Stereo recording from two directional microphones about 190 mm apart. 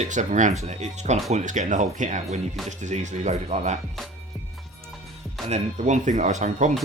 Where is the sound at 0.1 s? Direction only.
40° right (ahead or behind).